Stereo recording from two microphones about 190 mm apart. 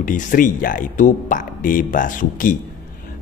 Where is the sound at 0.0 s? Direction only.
45° left (ahead or behind).